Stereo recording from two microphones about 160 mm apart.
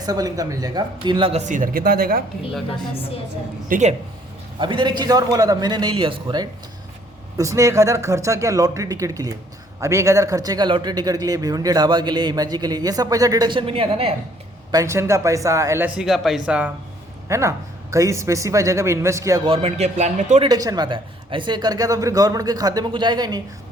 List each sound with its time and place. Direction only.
0.0 s speech: 25° right (ahead or behind); by 2.2 s 65° right (ahead or behind)
3.7 s a man's voice: 50° right (ahead or behind)
4.6 s a man's voice: 30° right (ahead or behind)
14.7 s speech: 20° right (ahead or behind)
17.2 s a man's voice: 20° right (ahead or behind)
19.5 s a man's voice: 40° right (ahead or behind)
20.4 s a man's voice: 25° right (ahead or behind)